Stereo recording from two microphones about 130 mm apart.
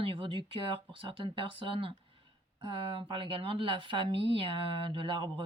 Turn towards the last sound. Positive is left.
turn(degrees=-40)  # may be behind; listen again after turning